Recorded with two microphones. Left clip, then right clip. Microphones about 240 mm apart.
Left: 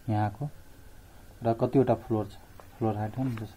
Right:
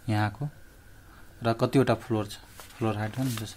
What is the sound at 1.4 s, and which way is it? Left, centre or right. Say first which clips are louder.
Speech: even; centre.